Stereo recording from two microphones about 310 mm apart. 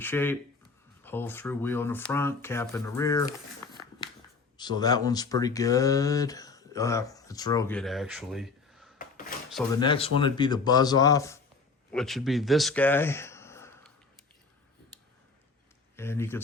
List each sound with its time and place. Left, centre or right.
0.0 s speech: centre
4.5 s speech: centre
9.8 s speech: centre
16.0 s speech: centre